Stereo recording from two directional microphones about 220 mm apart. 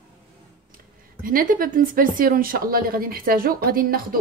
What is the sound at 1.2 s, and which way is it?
Speech, 40° right (ahead or behind).